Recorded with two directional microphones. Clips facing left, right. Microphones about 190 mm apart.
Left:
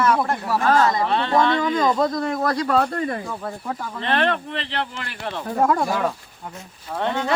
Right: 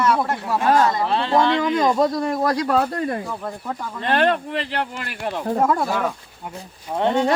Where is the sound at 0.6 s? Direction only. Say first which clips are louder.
Right 1 dB; 10° right (ahead or behind).